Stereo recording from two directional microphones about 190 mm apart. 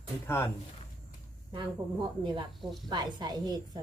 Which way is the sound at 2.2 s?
25° right (ahead or behind).